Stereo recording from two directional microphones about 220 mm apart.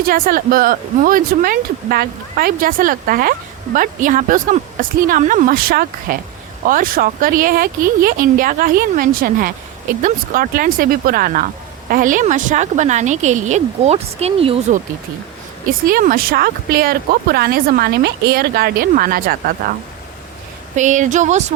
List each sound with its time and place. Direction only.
0.1 s speech: 40° right (ahead or behind)
15.9 s a woman's voice: 40° right (ahead or behind)
20.7 s speech: 35° right (ahead or behind)